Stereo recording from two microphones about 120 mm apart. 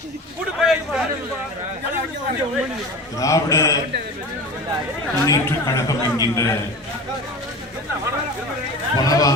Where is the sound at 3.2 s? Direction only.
25° left (ahead or behind).